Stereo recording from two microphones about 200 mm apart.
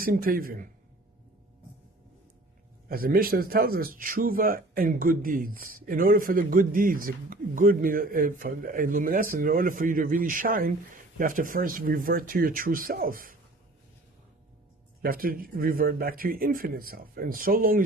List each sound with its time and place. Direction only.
0.0 s a man's voice: 45° right (ahead or behind)
2.9 s a man's voice: 45° right (ahead or behind)
15.0 s a man's voice: 45° right (ahead or behind)